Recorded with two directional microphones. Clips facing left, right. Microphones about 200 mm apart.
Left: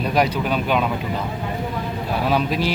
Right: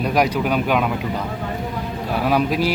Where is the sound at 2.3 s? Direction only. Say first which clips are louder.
Right 3 dB; 10° right (ahead or behind).